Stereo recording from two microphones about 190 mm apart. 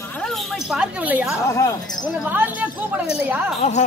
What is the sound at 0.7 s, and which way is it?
Speech, 5° right (ahead or behind).